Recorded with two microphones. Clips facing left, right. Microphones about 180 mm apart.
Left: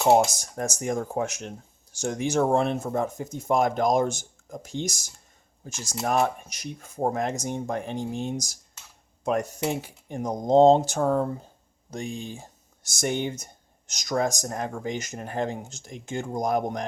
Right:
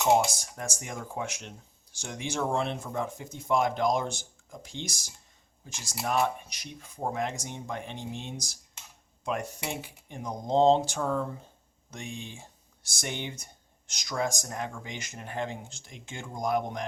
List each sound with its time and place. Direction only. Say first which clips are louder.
0.0 s speech: left 4 dB; 40° left (ahead or behind)